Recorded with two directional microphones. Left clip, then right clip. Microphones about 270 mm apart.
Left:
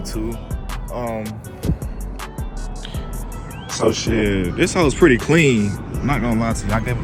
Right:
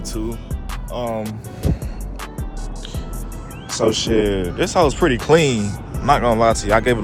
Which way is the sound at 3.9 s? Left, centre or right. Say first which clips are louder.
Right 2 dB; centre.